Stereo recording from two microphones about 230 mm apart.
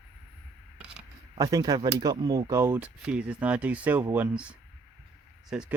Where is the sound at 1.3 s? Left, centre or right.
Centre.